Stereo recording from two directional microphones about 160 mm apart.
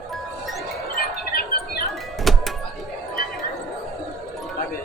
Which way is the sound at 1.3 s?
70° left (ahead or behind).